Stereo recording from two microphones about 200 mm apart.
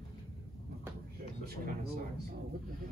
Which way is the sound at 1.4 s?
50° right (ahead or behind).